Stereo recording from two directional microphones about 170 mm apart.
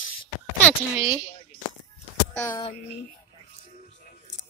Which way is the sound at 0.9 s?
10° right (ahead or behind).